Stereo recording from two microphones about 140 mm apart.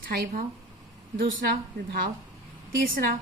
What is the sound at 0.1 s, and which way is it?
A woman's voice, 90° right.